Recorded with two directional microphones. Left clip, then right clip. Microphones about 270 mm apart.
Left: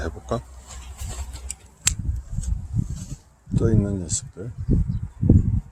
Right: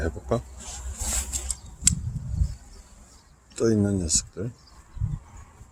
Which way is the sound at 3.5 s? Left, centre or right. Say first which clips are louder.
Right 1 dB; centre.